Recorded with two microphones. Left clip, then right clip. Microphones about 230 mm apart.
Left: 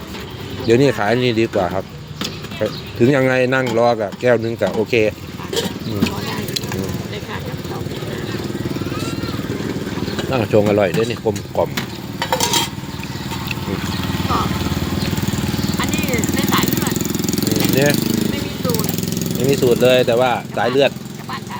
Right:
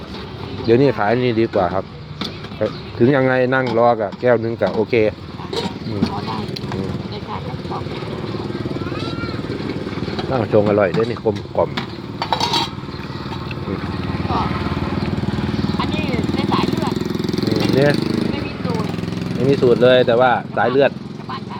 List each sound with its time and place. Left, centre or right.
0.7 s speech: centre
10.2 s speech: centre
11.3 s speech: centre
12.3 s a sound: centre
15.8 s lawn mower: centre
17.0 s lawn mower: left
19.5 s speech: centre